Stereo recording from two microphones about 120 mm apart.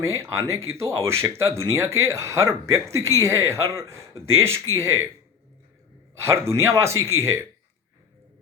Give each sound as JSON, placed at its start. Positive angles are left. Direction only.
{"t": 0.2, "sound": "speech", "side_deg": -25}
{"t": 6.1, "sound": "speech", "side_deg": -20}